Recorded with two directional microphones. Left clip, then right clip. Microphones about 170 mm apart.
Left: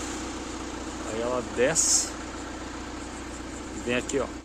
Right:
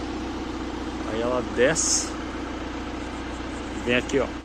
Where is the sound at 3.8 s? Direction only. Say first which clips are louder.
Right 5 dB; 5° left (ahead or behind).